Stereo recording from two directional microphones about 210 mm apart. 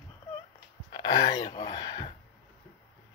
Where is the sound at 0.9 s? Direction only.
20° left (ahead or behind).